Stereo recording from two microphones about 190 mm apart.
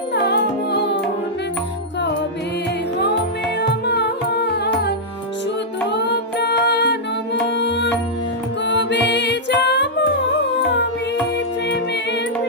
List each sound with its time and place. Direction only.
0.1 s music: 60° left (ahead or behind)
3.6 s music: 60° left (ahead or behind)